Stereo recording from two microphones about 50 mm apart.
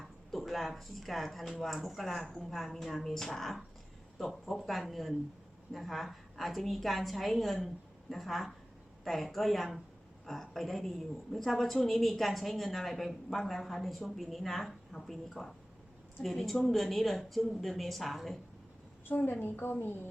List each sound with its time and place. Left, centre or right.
0.0 s a woman's voice: centre
19.1 s a woman's voice: left